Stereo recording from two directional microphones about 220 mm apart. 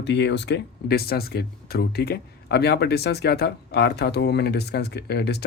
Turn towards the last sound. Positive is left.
turn(degrees=50)  # may be behind; listen again after turning